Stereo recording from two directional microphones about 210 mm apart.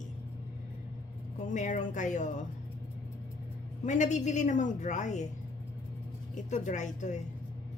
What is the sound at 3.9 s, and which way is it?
A woman's voice, 35° left (ahead or behind).